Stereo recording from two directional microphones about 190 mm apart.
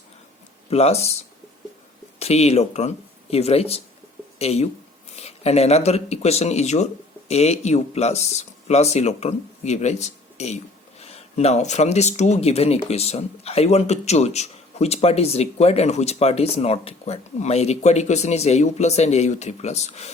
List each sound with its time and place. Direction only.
0.7 s speech: 35° left (ahead or behind)
2.1 s speech: 35° left (ahead or behind)